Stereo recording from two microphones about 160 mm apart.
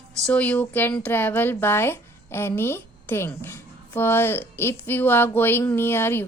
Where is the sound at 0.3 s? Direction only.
10° left (ahead or behind).